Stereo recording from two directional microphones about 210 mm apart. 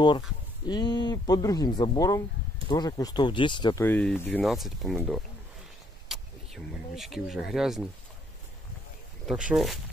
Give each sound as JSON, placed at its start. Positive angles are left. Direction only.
{"t": 0.7, "sound": "speech", "side_deg": 20}
{"t": 3.8, "sound": "speech", "side_deg": 10}
{"t": 9.2, "sound": "speech", "side_deg": 0}